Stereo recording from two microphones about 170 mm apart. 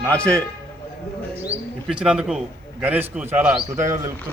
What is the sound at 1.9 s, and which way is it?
A man's voice, 5° right (ahead or behind).